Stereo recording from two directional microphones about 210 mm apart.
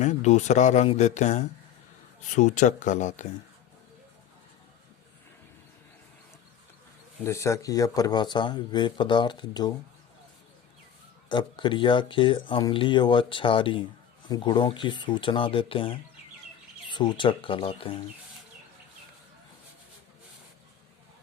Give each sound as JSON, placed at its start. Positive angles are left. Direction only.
{"t": 0.0, "sound": "speech", "side_deg": 35}
{"t": 7.3, "sound": "speech", "side_deg": 15}
{"t": 11.3, "sound": "speech", "side_deg": 20}